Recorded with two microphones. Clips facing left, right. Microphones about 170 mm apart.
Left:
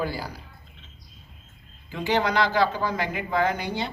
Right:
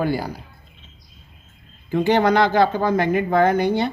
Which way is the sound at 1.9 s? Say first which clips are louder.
Right 8 dB; 55° right (ahead or behind).